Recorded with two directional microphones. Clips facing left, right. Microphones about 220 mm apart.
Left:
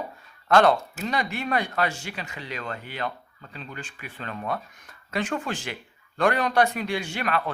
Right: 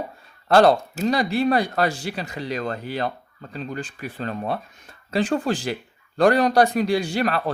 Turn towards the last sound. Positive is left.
turn(degrees=-35)  # may be behind; listen again after turning